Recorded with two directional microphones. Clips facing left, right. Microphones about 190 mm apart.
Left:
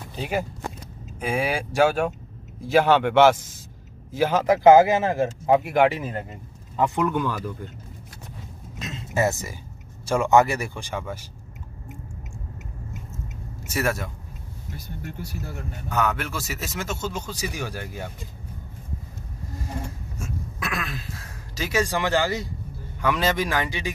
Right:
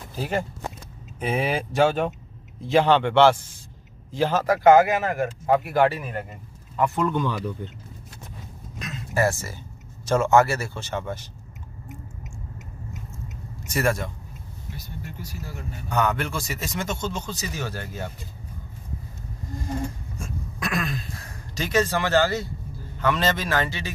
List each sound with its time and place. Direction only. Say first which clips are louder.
1.2 s a man's voice: even; centre (ahead or behind)
1.5 s a man's voice: even; 10° left (ahead or behind)
7.0 s speech: even; 10° left (ahead or behind)
8.8 s a sound: even; 25° left (ahead or behind)
10.0 s speech: even; 15° left (ahead or behind)
13.7 s a man's voice: right 2 dB; 5° left (ahead or behind)
14.8 s speech: left 3 dB; 55° left (ahead or behind)
15.9 s a man's voice: right 1 dB; centre (ahead or behind)
20.2 s throat clearing: left 1 dB; 5° left (ahead or behind)
22.9 s speech: even; 10° left (ahead or behind)